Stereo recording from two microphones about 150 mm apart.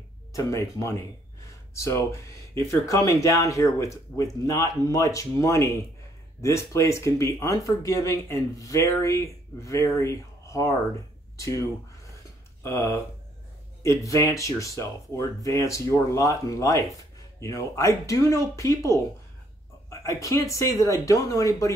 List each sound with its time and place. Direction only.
0.3 s speech: 20° left (ahead or behind)
12.6 s speech: 20° left (ahead or behind)